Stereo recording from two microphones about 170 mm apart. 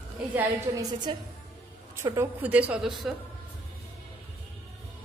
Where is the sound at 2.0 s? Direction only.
10° right (ahead or behind).